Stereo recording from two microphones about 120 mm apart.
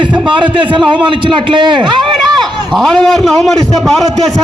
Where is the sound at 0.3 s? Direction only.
40° right (ahead or behind).